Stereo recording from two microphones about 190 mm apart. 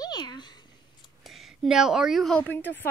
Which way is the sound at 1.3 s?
Centre (ahead or behind).